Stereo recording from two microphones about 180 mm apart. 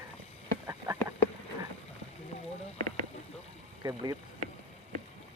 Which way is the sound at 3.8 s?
20° right (ahead or behind).